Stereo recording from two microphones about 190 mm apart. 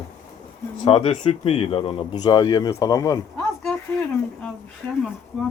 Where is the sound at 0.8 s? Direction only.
30° left (ahead or behind).